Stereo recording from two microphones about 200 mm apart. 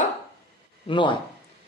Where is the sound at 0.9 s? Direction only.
25° left (ahead or behind).